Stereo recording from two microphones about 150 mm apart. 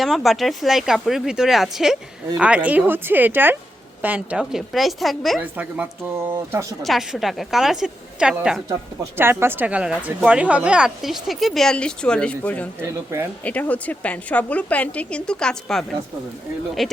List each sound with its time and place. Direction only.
0.0 s a woman's voice: centre (ahead or behind)
5.4 s a woman's voice: 10° right (ahead or behind)
6.8 s a woman's voice: centre (ahead or behind)
9.1 s a woman's voice: 15° right (ahead or behind); by 12.6 s 10° left (ahead or behind)
12.8 s speech: 20° right (ahead or behind)
13.4 s a woman's voice: 10° left (ahead or behind)